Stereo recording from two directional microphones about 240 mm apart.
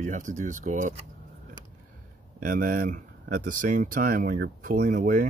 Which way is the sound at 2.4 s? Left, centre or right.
Right.